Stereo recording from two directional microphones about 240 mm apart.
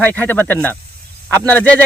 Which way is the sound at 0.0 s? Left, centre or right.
Centre.